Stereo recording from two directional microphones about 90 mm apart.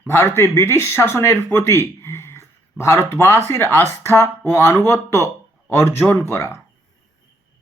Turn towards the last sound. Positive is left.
turn(degrees=35)  # may be behind; listen again after turning